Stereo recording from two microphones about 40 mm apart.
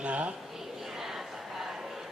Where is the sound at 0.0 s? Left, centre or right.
Right.